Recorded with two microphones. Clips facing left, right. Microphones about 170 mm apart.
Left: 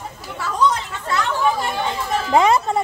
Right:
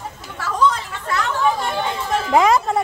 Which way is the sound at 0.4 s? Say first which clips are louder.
Even; 20° left (ahead or behind).